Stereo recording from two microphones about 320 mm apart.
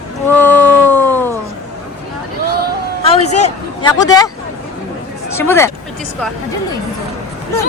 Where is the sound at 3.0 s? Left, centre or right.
Centre.